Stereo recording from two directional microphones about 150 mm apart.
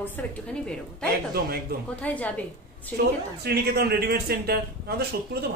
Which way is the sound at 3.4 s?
90° right.